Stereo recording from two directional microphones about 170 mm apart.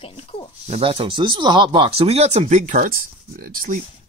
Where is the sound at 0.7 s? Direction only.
35° right (ahead or behind); by 3.8 s 55° right (ahead or behind).